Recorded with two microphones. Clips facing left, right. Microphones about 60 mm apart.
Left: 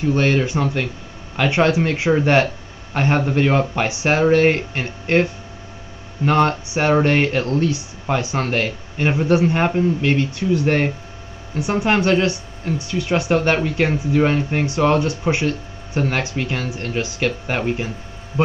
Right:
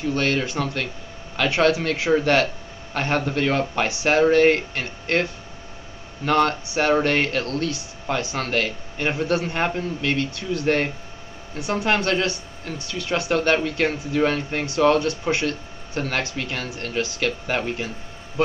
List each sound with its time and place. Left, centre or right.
0.1 s speech: centre